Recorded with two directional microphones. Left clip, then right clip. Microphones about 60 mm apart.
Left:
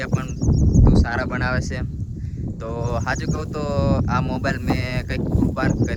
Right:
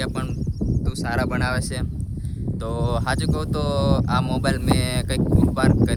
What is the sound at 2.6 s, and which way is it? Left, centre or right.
Speech, right.